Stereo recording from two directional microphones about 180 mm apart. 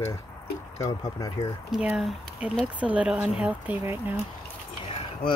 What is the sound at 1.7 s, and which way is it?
Speech, 5° right (ahead or behind).